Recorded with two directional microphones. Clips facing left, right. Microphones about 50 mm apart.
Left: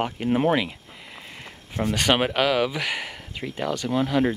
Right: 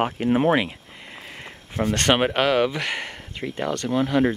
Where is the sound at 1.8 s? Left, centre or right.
Centre.